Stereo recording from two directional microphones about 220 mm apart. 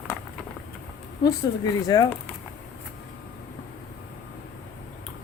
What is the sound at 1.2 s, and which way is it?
Speech, 20° left (ahead or behind).